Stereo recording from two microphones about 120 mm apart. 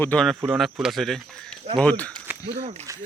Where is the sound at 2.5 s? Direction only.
70° right (ahead or behind).